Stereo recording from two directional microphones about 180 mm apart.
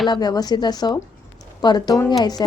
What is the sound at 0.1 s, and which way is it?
A woman's voice, 20° left (ahead or behind).